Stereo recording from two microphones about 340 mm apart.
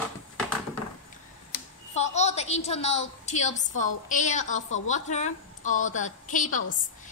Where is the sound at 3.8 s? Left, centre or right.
Left.